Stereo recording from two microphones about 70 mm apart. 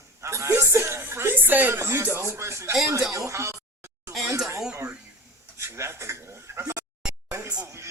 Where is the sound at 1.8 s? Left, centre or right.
Right.